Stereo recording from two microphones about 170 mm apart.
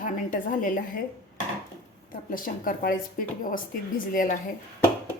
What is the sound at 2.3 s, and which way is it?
Speech, 55° left (ahead or behind).